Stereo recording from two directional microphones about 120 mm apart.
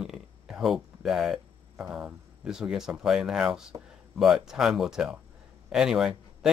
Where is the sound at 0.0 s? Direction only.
5° right (ahead or behind).